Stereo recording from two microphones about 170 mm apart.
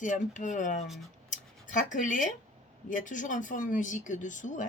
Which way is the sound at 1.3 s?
50° left (ahead or behind).